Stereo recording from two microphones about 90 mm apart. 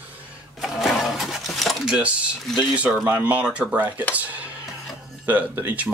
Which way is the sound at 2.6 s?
15° right (ahead or behind).